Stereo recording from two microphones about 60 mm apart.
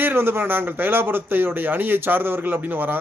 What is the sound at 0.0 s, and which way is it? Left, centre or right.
Speech, right.